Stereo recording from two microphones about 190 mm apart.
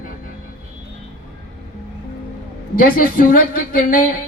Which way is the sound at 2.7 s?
50° left (ahead or behind).